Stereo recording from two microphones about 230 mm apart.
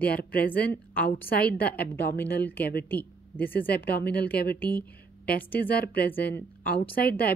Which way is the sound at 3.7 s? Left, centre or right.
Left.